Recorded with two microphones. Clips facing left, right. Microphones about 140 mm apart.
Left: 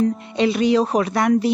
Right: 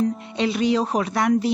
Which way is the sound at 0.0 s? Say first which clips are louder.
Left 3 dB; centre (ahead or behind).